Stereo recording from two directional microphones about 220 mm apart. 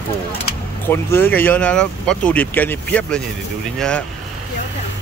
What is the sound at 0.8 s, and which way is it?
Speech, 10° left (ahead or behind).